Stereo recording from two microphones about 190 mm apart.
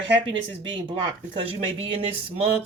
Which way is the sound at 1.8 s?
30° right (ahead or behind).